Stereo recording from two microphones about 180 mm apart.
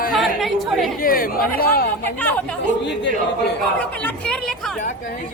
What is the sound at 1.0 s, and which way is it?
Speech, 50° left (ahead or behind).